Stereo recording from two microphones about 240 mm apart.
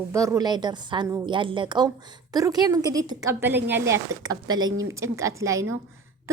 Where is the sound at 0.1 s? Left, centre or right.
Centre.